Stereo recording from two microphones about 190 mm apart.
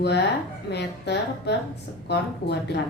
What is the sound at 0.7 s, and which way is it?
A woman's voice, 60° left (ahead or behind).